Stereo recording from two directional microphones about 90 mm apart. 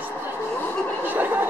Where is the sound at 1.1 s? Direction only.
20° right (ahead or behind).